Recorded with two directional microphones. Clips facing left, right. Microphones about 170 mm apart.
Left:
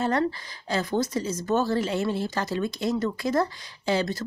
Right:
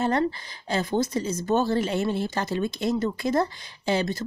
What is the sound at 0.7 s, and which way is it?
Speech, 25° right (ahead or behind).